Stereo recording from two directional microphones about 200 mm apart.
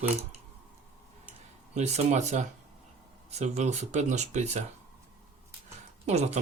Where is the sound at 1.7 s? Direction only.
35° right (ahead or behind).